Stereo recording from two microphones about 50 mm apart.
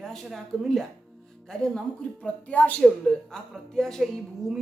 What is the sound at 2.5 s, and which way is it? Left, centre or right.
Speech, left.